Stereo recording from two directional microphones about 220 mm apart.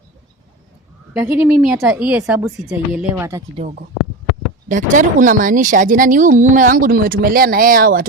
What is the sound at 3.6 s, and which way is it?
Speech, 30° right (ahead or behind).